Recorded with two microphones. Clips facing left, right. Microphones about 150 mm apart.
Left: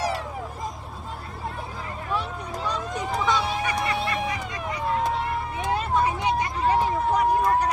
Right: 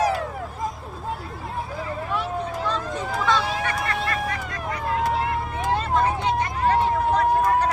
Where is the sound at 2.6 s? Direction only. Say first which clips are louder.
Right 2 dB; 15° left (ahead or behind).